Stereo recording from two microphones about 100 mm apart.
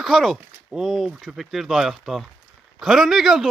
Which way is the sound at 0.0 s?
Centre (ahead or behind).